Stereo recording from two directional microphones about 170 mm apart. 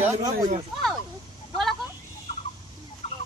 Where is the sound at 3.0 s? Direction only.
40° left (ahead or behind).